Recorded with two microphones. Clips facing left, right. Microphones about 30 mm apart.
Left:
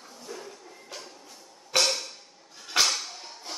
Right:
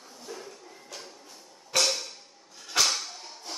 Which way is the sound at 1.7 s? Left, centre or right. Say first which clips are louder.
Left 1 dB; left.